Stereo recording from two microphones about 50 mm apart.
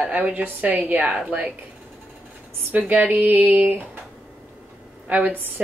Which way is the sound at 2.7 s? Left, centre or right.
Right.